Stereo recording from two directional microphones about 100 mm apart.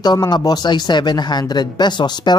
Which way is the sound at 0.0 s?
45° left (ahead or behind).